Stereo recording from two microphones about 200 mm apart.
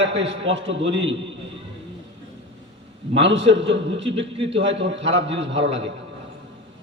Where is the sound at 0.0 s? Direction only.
65° right (ahead or behind).